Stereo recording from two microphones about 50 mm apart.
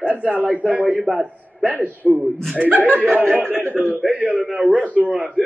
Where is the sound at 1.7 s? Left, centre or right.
Right.